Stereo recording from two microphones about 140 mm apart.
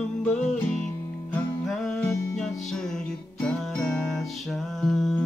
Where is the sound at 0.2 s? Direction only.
10° left (ahead or behind).